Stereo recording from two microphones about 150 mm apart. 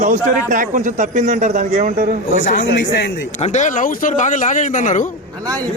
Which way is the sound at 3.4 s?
50° left (ahead or behind).